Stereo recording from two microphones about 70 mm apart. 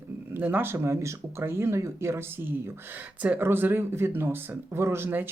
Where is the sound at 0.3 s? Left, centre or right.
Right.